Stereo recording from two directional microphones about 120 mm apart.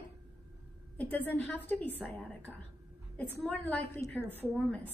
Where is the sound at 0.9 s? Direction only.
10° left (ahead or behind).